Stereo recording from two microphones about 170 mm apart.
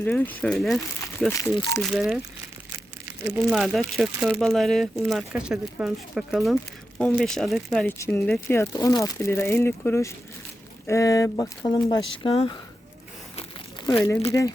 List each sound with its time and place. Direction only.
0.0 s speech: 10° left (ahead or behind)
1.3 s speech: 20° left (ahead or behind)
1.9 s speech: 5° right (ahead or behind)
3.5 s speech: centre (ahead or behind)
7.9 s speech: 15° left (ahead or behind); by 12.5 s 30° left (ahead or behind)
13.9 s speech: 25° left (ahead or behind)